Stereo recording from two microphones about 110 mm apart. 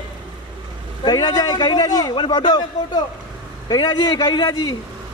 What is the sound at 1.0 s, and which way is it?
A man's voice, 35° left (ahead or behind).